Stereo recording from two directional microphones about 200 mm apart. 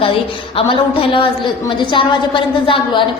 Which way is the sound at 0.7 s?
25° left (ahead or behind).